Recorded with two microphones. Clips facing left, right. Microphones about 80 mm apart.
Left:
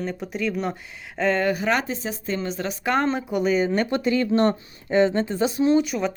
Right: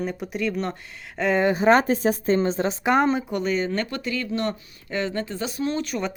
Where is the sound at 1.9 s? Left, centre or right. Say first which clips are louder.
Right 7 dB; right.